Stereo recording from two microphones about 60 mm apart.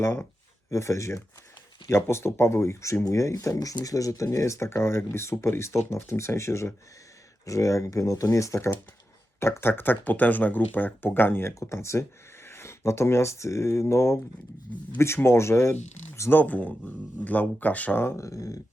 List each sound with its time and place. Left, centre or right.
0.0 s speech: left
0.7 s speech: left
1.9 s speech: left
7.4 s speech: left
9.4 s speech: left
16.3 s speech: left
18.2 s speech: left